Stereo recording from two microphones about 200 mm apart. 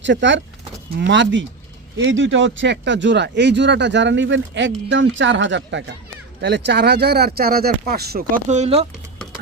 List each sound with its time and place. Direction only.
0.0 s speech: 65° right (ahead or behind)
8.4 s speech: 35° right (ahead or behind)